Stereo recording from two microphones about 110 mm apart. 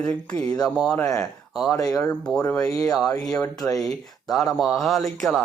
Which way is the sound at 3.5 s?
35° left (ahead or behind).